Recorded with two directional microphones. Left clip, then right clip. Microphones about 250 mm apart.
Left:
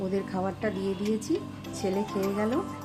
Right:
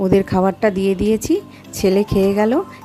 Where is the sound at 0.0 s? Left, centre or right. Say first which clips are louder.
Right 15 dB; right.